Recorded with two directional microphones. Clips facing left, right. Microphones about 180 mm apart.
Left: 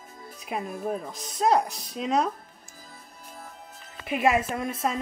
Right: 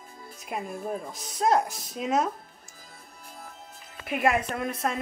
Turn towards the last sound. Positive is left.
turn(degrees=0)  # may be behind; listen again after turning